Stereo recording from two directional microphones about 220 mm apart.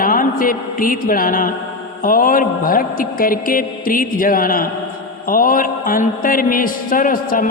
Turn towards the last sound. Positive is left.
turn(degrees=40)  # may be behind; listen again after turning